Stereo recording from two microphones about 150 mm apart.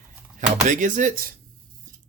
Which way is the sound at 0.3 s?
60° right (ahead or behind).